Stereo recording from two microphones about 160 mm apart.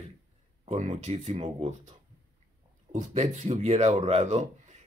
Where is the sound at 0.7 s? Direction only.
45° right (ahead or behind).